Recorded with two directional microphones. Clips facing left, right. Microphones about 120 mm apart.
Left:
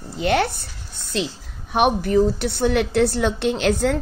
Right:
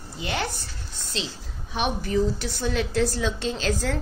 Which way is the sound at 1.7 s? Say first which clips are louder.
Left 7 dB; 55° left (ahead or behind).